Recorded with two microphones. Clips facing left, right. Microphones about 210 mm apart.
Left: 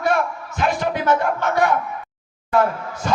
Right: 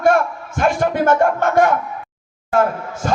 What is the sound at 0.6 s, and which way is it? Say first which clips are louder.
Speech: right 5 dB; 50° right (ahead or behind).